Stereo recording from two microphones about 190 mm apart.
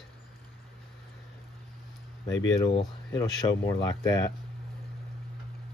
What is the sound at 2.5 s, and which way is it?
Speech, 20° left (ahead or behind).